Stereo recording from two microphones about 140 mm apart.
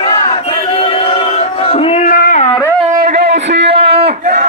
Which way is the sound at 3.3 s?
45° right (ahead or behind).